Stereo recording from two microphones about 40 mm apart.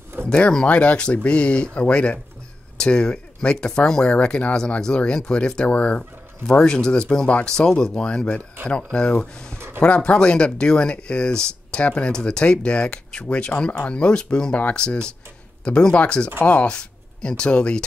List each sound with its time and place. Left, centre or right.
0.4 s speech: left
0.7 s speech: left
6.6 s speech: centre